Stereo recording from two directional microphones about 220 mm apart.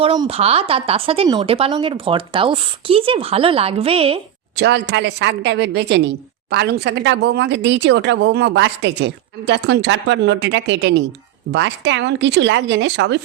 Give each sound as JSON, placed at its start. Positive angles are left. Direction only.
{"t": 0.0, "sound": "speech", "side_deg": -25}
{"t": 4.5, "sound": "a woman's voice", "side_deg": -50}